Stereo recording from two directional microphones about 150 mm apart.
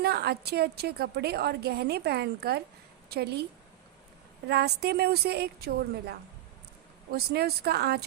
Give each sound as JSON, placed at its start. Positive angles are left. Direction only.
{"t": 0.0, "sound": "a woman's voice", "side_deg": -90}
{"t": 4.4, "sound": "a woman's voice", "side_deg": -90}